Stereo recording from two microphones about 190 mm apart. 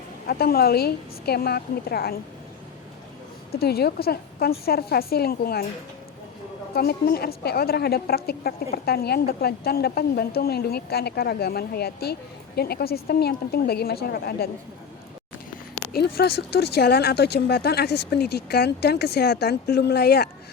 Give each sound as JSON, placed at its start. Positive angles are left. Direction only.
{"t": 0.3, "sound": "a woman's voice", "side_deg": 55}
{"t": 3.5, "sound": "a woman's voice", "side_deg": 55}
{"t": 6.7, "sound": "a woman's voice", "side_deg": 55}
{"t": 15.9, "sound": "a woman's voice", "side_deg": 55}